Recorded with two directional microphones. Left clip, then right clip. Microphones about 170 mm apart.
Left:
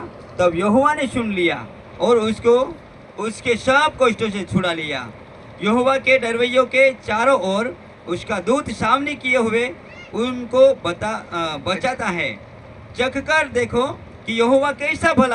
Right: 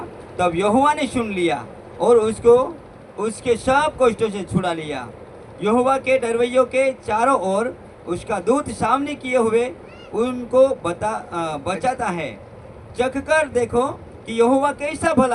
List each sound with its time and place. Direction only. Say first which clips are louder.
0.3 s a man's voice: left 1 dB; 55° right (ahead or behind)